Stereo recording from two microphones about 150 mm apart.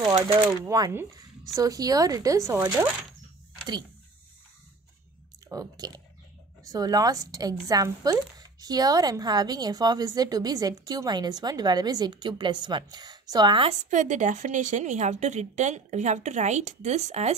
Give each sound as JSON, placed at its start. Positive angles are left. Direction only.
{"t": 0.7, "sound": "speech", "side_deg": -25}
{"t": 5.5, "sound": "speech", "side_deg": -25}
{"t": 13.7, "sound": "a woman's voice", "side_deg": -55}